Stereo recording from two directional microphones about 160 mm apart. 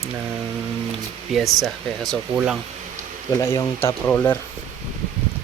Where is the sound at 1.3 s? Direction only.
Centre (ahead or behind).